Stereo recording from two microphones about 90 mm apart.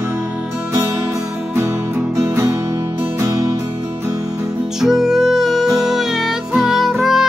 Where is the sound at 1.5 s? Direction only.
30° right (ahead or behind).